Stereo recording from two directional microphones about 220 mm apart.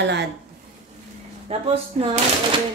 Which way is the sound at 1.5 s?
30° right (ahead or behind).